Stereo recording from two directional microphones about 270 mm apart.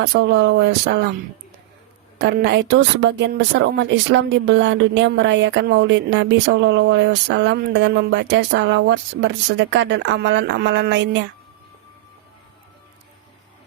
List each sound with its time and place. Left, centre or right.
0.0 s a woman's voice: right
2.1 s a woman's voice: right